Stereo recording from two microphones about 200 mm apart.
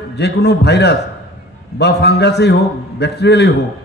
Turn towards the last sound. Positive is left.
turn(degrees=55)  # may be behind; listen again after turning